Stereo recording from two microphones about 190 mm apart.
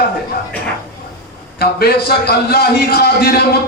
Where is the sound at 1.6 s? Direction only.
55° left (ahead or behind).